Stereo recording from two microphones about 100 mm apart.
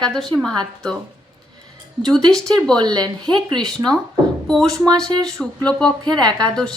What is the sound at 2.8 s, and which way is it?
Speech, 45° right (ahead or behind).